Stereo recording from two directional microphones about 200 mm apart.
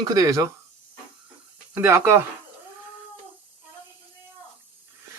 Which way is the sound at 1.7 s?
10° right (ahead or behind).